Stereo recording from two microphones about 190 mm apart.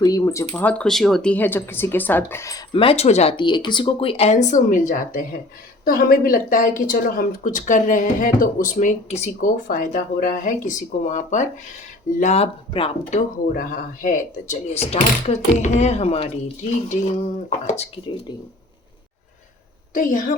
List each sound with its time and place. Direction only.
0.0 s speech: 20° left (ahead or behind)
0.5 s speech: 10° left (ahead or behind); by 18.0 s 35° left (ahead or behind)
19.9 s speech: 45° left (ahead or behind)